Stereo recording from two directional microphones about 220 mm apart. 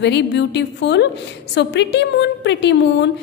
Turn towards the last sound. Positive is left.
turn(degrees=50)  # may be behind; listen again after turning